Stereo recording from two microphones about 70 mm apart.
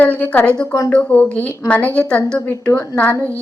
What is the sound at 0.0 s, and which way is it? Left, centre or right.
A woman's voice, left.